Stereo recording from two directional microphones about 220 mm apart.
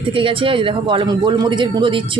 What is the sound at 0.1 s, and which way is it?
A man's voice, 25° right (ahead or behind).